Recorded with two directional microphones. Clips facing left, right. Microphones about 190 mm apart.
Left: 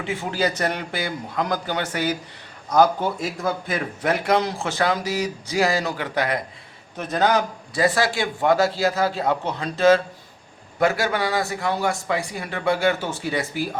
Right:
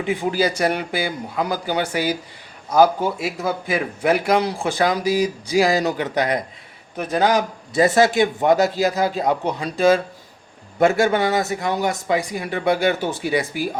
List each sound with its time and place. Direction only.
0.0 s a man's voice: 15° right (ahead or behind)
10.8 s a man's voice: 25° right (ahead or behind)